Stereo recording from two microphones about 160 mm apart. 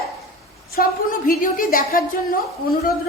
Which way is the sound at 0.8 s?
60° left (ahead or behind).